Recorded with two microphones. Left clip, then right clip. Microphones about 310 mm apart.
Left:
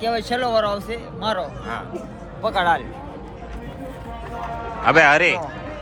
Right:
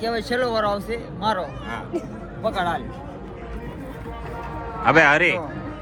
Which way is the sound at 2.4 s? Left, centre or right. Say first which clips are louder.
Left 5 dB; left.